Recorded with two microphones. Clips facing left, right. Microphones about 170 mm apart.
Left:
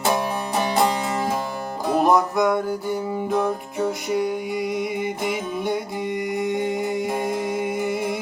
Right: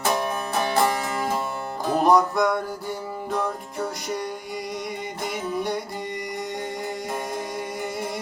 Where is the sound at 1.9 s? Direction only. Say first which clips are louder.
Even; centre (ahead or behind).